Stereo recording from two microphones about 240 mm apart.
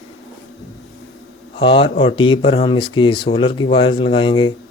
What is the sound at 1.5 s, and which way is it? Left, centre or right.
Speech, left.